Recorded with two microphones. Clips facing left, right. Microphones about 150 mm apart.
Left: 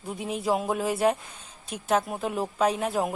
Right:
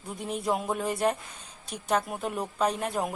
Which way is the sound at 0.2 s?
Centre (ahead or behind).